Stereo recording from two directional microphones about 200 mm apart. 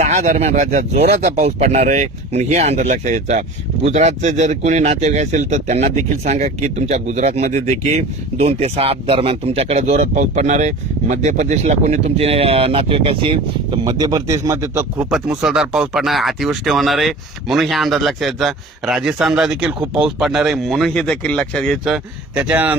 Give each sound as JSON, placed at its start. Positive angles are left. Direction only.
{"t": 0.0, "sound": "speech", "side_deg": -35}